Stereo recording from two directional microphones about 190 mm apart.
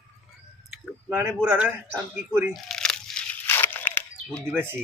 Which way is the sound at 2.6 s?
Centre (ahead or behind).